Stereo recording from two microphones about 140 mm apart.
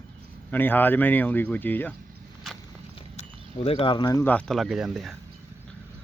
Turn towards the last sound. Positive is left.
turn(degrees=0)  # may be behind; listen again after turning